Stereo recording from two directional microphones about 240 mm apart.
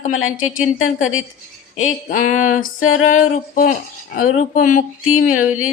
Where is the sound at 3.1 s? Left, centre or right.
Left.